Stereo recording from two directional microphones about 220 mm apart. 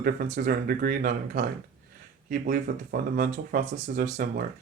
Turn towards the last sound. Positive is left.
turn(degrees=-40)  # may be behind; listen again after turning